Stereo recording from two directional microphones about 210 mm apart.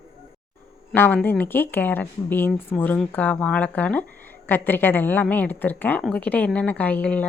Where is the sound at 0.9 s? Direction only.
10° left (ahead or behind).